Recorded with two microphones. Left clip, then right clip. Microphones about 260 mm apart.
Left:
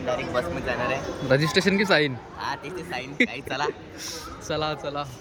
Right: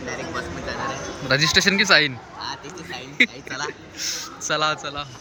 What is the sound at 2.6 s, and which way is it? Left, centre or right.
A man's voice, centre.